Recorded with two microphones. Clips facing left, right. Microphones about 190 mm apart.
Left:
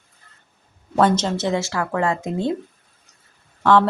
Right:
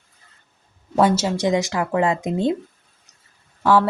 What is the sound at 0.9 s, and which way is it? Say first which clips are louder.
Speech: even; 10° right (ahead or behind).